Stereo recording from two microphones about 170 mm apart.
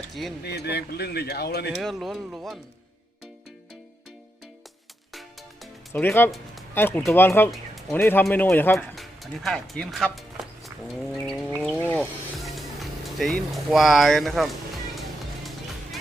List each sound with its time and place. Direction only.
0.1 s speech: centre (ahead or behind)
0.4 s speech: 75° left (ahead or behind)
1.7 s speech: centre (ahead or behind)
5.9 s speech: 10° left (ahead or behind)
7.5 s music: centre (ahead or behind)
7.9 s speech: 15° left (ahead or behind)
9.0 s speech: centre (ahead or behind)
11.1 s vehicle: centre (ahead or behind)
11.8 s wild animals: 10° left (ahead or behind)
13.5 s speech: centre (ahead or behind)